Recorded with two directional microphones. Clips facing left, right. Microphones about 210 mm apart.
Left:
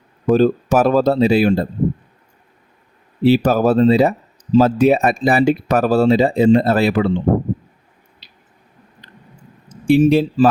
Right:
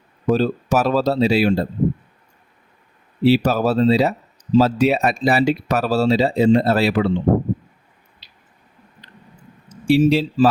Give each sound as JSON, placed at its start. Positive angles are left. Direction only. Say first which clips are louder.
{"t": 0.3, "sound": "speech", "louder": "left 4 dB", "side_deg": 50}
{"t": 3.2, "sound": "speech", "louder": "left 3 dB", "side_deg": 50}
{"t": 9.6, "sound": "speech", "louder": "left 3 dB", "side_deg": 50}